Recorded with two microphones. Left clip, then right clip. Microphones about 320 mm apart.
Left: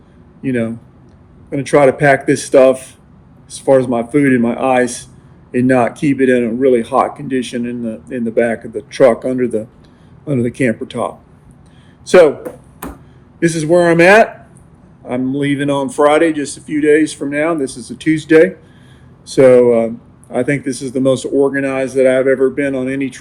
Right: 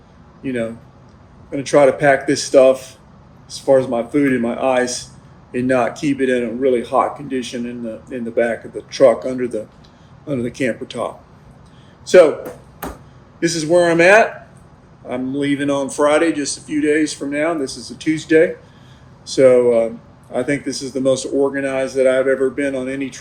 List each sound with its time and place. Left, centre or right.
0.4 s speech: left
13.4 s speech: left
15.4 s speech: left